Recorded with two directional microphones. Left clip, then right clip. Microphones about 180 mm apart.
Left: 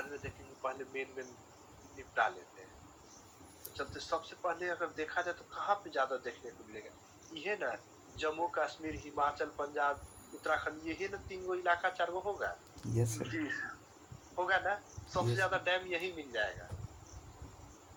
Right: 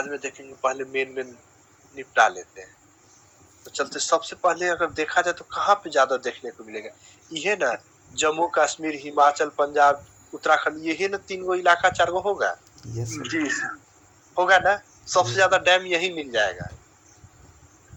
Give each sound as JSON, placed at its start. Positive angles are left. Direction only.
{"t": 0.0, "sound": "a man's voice", "side_deg": -55}
{"t": 3.8, "sound": "a man's voice", "side_deg": -55}